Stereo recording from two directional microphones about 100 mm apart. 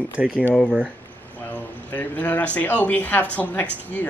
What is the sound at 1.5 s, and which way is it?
Speech, 20° left (ahead or behind).